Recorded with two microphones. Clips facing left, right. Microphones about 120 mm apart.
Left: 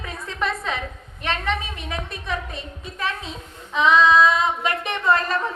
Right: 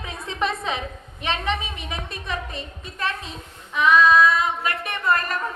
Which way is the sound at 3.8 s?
20° left (ahead or behind).